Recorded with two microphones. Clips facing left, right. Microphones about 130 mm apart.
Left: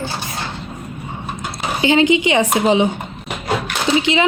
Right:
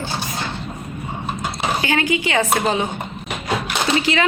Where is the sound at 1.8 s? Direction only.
20° left (ahead or behind).